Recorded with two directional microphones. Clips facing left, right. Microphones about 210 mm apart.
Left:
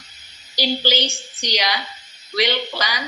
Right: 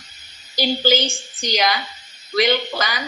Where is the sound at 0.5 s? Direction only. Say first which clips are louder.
Right 3 dB; 50° right (ahead or behind).